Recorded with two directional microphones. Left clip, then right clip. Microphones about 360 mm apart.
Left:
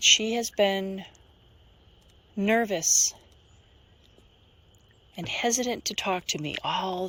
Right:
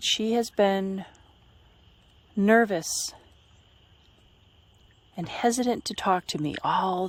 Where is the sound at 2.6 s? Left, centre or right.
Centre.